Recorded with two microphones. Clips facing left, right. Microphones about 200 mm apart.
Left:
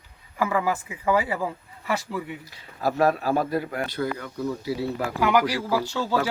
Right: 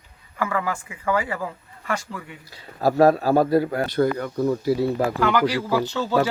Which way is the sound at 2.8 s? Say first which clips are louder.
Right 5 dB; 35° right (ahead or behind).